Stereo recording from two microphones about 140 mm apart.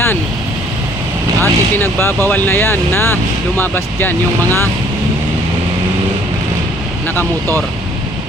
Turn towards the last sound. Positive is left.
turn(degrees=15)  # may be behind; listen again after turning